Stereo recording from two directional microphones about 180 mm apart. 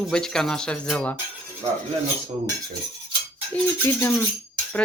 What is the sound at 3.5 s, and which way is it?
Cutlery, 10° left (ahead or behind).